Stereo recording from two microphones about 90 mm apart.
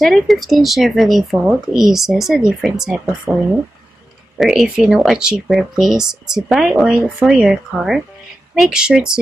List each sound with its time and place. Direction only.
0.0 s speech: centre (ahead or behind)
3.3 s speech: 20° right (ahead or behind)
4.4 s speech: 5° right (ahead or behind)